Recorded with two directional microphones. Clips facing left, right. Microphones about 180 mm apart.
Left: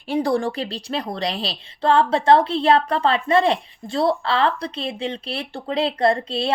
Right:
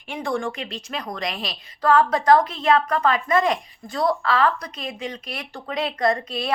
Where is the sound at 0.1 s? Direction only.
35° left (ahead or behind).